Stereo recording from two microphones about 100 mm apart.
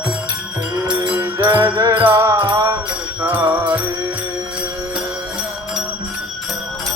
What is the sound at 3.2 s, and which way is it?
Music, 15° right (ahead or behind).